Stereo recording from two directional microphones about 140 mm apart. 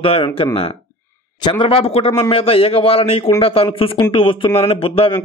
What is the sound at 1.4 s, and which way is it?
A man's voice, 35° left (ahead or behind).